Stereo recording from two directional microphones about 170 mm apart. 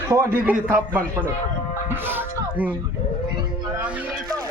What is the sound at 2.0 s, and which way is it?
Speech, 10° right (ahead or behind).